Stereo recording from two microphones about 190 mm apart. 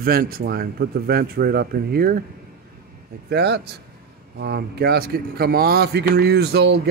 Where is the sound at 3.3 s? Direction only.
60° right (ahead or behind).